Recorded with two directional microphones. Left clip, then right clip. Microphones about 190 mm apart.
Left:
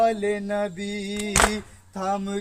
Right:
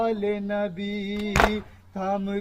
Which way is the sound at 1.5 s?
10° left (ahead or behind).